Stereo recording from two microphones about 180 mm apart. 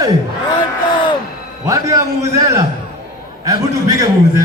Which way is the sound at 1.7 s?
20° right (ahead or behind).